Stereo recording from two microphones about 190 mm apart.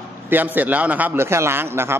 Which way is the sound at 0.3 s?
10° right (ahead or behind).